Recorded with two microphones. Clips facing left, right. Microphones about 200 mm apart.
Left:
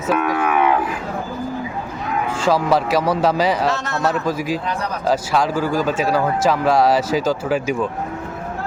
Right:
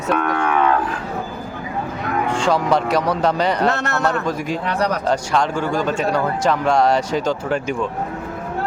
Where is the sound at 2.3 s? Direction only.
5° left (ahead or behind).